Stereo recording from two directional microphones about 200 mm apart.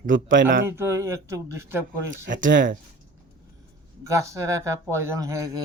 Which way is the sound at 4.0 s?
15° right (ahead or behind).